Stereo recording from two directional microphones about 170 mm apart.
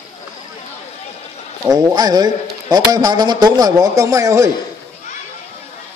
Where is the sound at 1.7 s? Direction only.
25° right (ahead or behind).